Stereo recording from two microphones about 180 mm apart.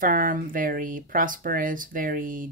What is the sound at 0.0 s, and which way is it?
Speech, 50° right (ahead or behind).